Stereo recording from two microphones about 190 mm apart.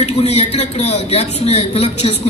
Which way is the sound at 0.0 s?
35° left (ahead or behind).